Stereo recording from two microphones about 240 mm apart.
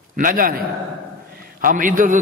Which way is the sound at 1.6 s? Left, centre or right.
Right.